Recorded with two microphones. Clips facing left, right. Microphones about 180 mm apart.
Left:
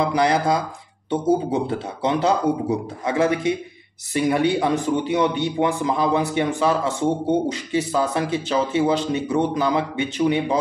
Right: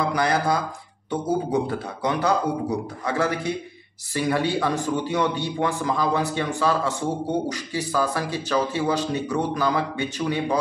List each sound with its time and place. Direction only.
0.0 s a man's voice: 25° left (ahead or behind)